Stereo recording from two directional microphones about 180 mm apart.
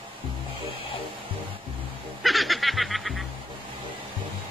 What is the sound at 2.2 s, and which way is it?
Snicker, centre (ahead or behind).